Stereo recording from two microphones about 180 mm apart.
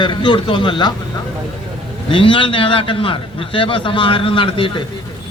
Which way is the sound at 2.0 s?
30° left (ahead or behind).